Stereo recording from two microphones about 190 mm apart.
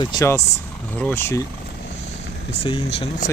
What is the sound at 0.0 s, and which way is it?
Speech, 20° left (ahead or behind).